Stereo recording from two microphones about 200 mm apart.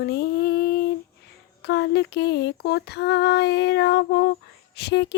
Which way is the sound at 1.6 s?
55° left (ahead or behind).